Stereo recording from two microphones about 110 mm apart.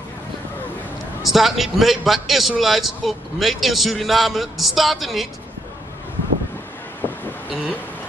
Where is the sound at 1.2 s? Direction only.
Centre (ahead or behind).